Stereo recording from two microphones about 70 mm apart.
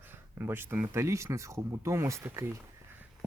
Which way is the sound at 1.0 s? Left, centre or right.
Right.